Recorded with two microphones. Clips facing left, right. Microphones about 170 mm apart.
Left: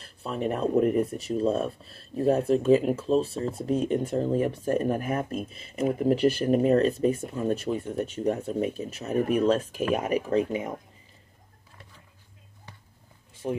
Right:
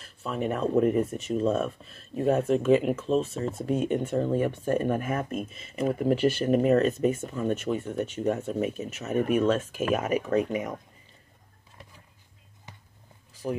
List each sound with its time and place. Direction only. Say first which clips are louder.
0.0 s speech: even; 35° left (ahead or behind)
13.4 s speech: left 1 dB; 30° left (ahead or behind)